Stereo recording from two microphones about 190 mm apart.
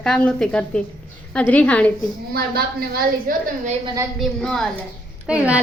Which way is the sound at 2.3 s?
55° right (ahead or behind).